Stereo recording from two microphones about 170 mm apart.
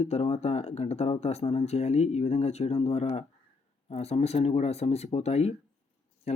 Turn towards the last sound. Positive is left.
turn(degrees=40)  # may be behind; listen again after turning